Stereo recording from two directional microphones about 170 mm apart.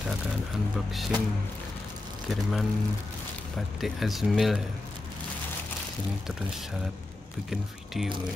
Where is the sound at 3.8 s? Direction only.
Centre (ahead or behind).